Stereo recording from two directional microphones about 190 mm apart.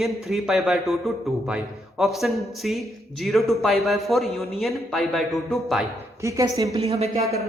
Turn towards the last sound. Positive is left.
turn(degrees=-30)  # may be behind; listen again after turning